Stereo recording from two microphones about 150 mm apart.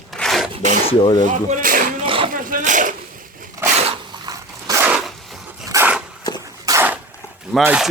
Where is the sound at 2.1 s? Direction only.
35° right (ahead or behind).